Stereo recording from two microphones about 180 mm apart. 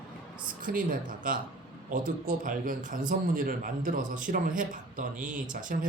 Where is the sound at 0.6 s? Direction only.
50° right (ahead or behind).